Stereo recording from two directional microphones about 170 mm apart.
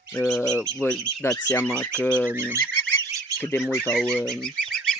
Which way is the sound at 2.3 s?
15° right (ahead or behind).